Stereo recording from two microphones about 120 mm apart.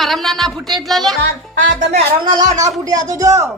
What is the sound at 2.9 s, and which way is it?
Speech, 30° right (ahead or behind).